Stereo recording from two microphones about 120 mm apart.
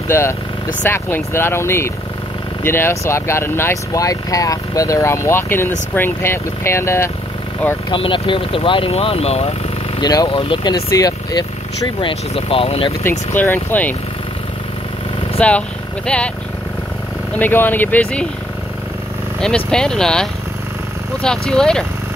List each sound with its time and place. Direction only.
0.1 s speech: 20° left (ahead or behind)
7.9 s speech: 45° left (ahead or behind); by 9.5 s 60° left (ahead or behind)
9.9 s speech: 35° left (ahead or behind); by 12.9 s 50° left (ahead or behind)
13.3 s speech: 15° left (ahead or behind)
15.4 s speech: 10° left (ahead or behind)
17.4 s speech: 15° left (ahead or behind)
19.4 s speech: 5° left (ahead or behind)